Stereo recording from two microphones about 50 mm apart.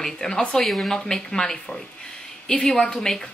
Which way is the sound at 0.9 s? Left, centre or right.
Centre.